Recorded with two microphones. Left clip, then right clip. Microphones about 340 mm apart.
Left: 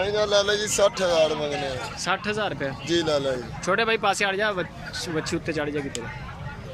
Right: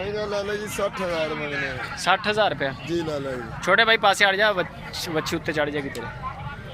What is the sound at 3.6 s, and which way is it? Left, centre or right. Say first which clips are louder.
Speech: right 5 dB; centre.